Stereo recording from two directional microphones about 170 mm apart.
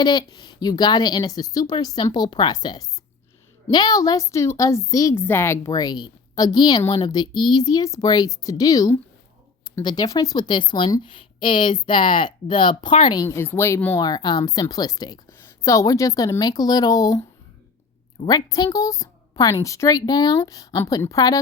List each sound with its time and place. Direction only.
0.0 s a woman's voice: 25° left (ahead or behind)
13.2 s a woman's voice: 15° left (ahead or behind)
18.3 s a woman's voice: 25° left (ahead or behind)